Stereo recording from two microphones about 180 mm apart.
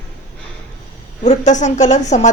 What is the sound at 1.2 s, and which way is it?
A woman's voice, 35° left (ahead or behind).